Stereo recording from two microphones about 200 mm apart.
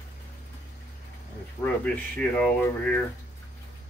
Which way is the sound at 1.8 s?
5° left (ahead or behind).